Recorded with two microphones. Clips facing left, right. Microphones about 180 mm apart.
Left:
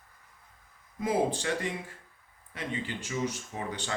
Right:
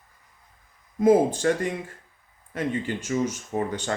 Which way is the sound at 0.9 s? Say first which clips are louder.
Right 10 dB; 45° right (ahead or behind).